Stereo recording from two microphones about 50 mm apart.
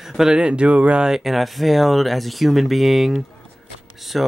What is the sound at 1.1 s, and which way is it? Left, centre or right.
Speech, centre.